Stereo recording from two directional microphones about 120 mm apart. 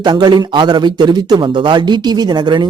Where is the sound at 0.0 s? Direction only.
40° right (ahead or behind).